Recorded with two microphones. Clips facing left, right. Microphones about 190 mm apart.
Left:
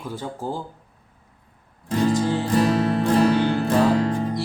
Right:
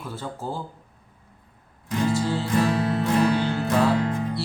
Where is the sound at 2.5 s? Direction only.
35° left (ahead or behind).